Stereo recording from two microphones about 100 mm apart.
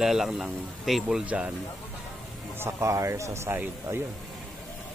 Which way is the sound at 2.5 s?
25° right (ahead or behind).